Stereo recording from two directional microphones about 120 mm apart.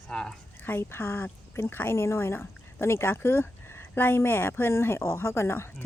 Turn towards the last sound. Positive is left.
turn(degrees=20)  # may be behind; listen again after turning